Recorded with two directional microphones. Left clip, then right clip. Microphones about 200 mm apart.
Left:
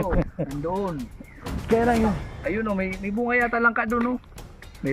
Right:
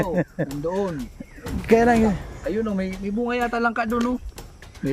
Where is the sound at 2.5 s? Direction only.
70° right (ahead or behind).